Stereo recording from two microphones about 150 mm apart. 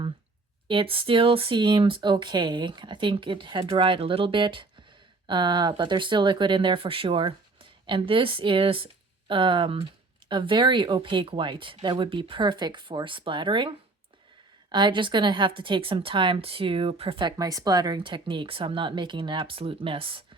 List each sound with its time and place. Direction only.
0.7 s speech: 35° right (ahead or behind)